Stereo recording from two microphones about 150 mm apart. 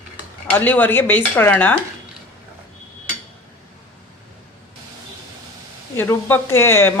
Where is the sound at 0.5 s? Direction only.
10° left (ahead or behind).